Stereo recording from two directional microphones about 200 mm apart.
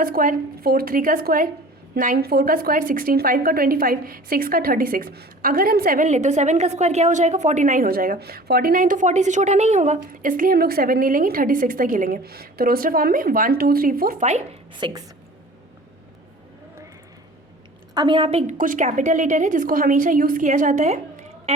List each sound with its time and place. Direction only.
0.0 s a woman's voice: 45° right (ahead or behind); by 15.0 s 25° right (ahead or behind)
17.9 s a woman's voice: 25° right (ahead or behind)